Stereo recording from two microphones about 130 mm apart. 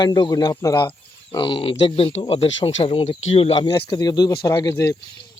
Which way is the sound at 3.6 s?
35° left (ahead or behind).